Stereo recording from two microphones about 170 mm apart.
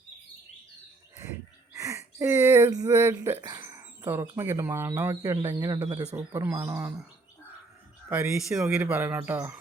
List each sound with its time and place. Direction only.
1.7 s speech: 20° right (ahead or behind)
5.3 s speech: 25° right (ahead or behind)
6.1 s speech: 10° right (ahead or behind)
8.1 s speech: 5° right (ahead or behind)